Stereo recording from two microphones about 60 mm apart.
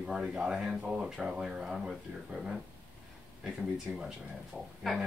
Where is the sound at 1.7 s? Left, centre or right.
Centre.